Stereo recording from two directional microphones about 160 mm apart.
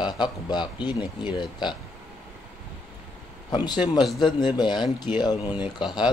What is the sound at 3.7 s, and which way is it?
Speech, 30° left (ahead or behind).